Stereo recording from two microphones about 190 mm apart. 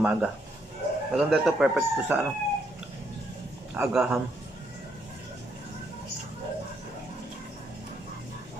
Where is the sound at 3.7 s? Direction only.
5° right (ahead or behind).